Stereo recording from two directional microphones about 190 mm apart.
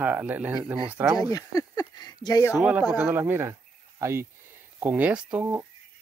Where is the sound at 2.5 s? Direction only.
10° right (ahead or behind).